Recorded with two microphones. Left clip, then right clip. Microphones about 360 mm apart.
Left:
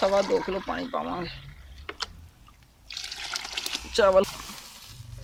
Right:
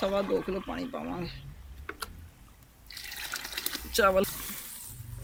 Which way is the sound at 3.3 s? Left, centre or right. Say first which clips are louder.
Left 4 dB; centre.